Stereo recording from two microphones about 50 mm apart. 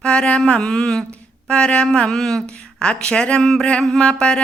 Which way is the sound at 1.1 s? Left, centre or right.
Left.